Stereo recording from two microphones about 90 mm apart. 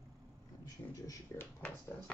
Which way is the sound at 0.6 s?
40° left (ahead or behind).